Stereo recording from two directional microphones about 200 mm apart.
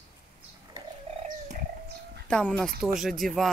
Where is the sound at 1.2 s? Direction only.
40° right (ahead or behind).